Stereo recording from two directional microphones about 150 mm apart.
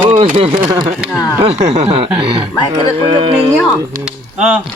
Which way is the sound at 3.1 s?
35° right (ahead or behind).